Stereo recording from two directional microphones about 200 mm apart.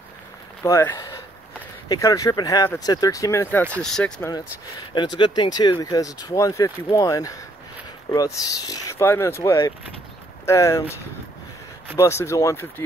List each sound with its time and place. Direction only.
0.7 s speech: 15° left (ahead or behind)
4.2 s speech: 20° left (ahead or behind)
12.0 s speech: 15° left (ahead or behind)